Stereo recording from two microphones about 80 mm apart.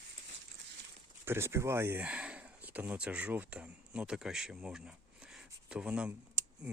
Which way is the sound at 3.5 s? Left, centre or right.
Centre.